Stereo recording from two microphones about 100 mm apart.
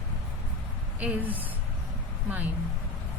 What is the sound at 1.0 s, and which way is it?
Speech, 15° right (ahead or behind).